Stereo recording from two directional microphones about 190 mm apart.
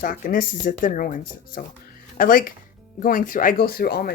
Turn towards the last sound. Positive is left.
turn(degrees=55)  # may be behind; listen again after turning